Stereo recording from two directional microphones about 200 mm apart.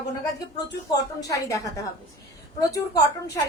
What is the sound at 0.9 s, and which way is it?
Speech, 20° left (ahead or behind).